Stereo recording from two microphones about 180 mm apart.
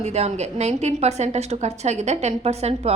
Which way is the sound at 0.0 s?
40° right (ahead or behind).